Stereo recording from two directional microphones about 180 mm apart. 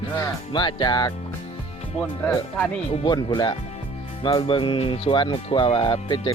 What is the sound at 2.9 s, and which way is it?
Speech, 25° left (ahead or behind).